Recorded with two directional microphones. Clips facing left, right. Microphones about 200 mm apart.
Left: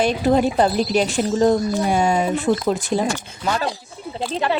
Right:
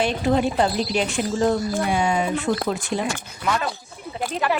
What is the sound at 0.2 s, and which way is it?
Speech, 35° left (ahead or behind).